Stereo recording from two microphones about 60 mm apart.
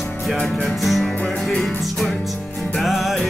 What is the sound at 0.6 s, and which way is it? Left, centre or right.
Music, centre.